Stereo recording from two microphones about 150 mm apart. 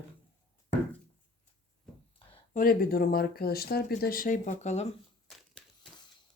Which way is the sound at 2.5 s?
65° left (ahead or behind).